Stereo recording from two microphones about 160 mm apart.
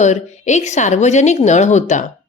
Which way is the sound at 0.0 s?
45° left (ahead or behind).